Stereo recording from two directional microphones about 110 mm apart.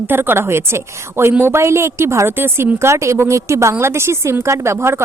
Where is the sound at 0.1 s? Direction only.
20° right (ahead or behind).